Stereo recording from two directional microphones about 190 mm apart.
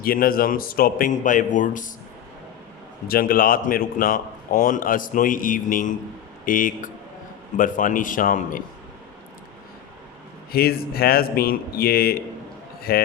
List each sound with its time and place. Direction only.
0.0 s speech: 50° left (ahead or behind)
3.1 s speech: 50° left (ahead or behind)
10.5 s speech: 55° left (ahead or behind)